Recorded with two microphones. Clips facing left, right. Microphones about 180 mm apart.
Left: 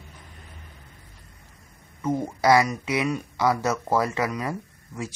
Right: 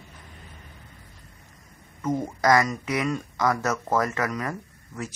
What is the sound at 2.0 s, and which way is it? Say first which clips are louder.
Speech: left 1 dB; 10° left (ahead or behind).